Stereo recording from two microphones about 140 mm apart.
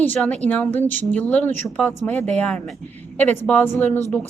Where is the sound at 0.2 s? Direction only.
10° left (ahead or behind).